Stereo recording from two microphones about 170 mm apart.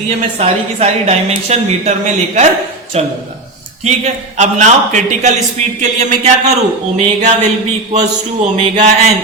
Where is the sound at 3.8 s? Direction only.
45° right (ahead or behind).